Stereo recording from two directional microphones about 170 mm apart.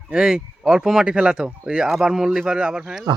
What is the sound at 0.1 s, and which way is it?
Speech, 5° right (ahead or behind).